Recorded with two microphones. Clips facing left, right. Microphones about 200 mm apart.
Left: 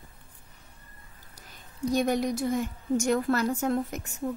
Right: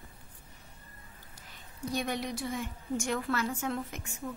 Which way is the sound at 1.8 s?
45° left (ahead or behind).